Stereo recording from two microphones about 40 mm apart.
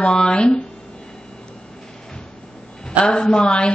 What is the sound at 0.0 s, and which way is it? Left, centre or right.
Speech, left.